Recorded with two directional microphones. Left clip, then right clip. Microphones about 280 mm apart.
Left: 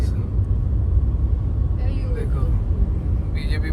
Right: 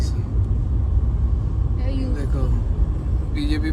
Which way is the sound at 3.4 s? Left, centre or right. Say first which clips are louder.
Right 8 dB; centre.